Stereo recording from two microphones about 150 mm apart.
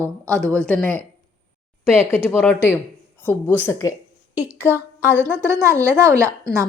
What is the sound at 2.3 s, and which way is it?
Speech, 10° left (ahead or behind).